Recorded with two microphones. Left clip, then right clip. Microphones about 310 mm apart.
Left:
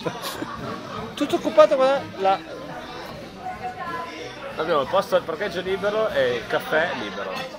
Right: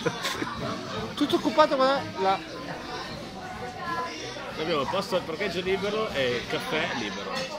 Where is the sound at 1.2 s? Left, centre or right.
Left.